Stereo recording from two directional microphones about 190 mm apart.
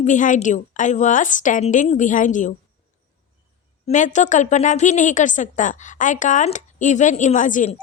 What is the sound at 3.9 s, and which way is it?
A woman's voice, 40° left (ahead or behind).